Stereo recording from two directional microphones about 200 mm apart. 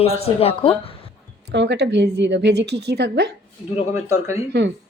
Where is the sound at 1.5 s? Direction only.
60° right (ahead or behind).